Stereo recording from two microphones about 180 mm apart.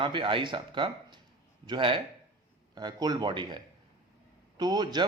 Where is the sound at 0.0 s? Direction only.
30° right (ahead or behind).